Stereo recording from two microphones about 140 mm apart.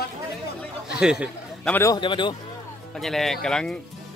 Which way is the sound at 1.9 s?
35° left (ahead or behind).